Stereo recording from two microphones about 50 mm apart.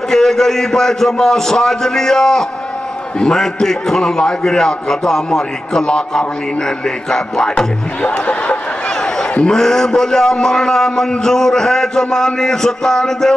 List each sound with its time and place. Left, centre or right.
0.1 s a man's voice: centre
8.1 s crowd: left
9.5 s a man's voice: centre